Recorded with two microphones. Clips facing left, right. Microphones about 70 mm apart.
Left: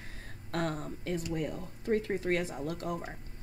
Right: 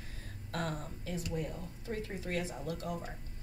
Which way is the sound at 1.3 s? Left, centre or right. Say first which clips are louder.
Left 4 dB; left.